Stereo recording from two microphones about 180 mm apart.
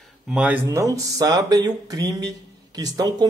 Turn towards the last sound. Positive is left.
turn(degrees=-20)  # may be behind; listen again after turning